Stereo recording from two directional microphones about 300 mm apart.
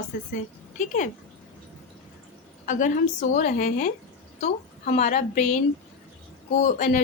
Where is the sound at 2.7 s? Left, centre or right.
Left.